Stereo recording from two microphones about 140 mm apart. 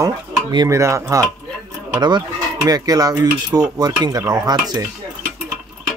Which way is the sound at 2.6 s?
25° right (ahead or behind).